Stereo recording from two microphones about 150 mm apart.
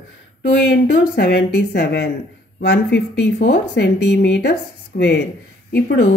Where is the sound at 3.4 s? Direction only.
90° left.